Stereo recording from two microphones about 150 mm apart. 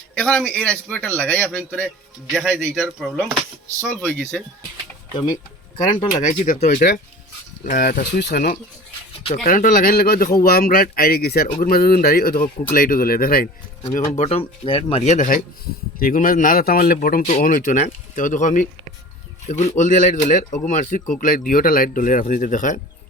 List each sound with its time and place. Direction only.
0.1 s a man's voice: 5° left (ahead or behind)
2.3 s speech: 5° right (ahead or behind)
3.8 s a man's voice: 10° left (ahead or behind)
5.1 s speech: 30° left (ahead or behind)
6.2 s a man's voice: 55° left (ahead or behind); by 7.0 s 90° left
7.6 s speech: 75° left (ahead or behind); by 8.5 s 90° left
9.5 s a man's voice: 65° left (ahead or behind)
13.8 s a man's voice: 45° left (ahead or behind); by 17.3 s 75° left (ahead or behind)
17.4 s speech: 60° left (ahead or behind)